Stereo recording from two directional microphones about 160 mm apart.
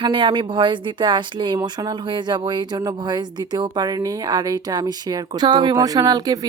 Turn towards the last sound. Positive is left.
turn(degrees=-25)  # may be behind; listen again after turning